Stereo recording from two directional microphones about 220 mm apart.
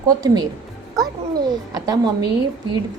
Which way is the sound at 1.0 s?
Centre (ahead or behind).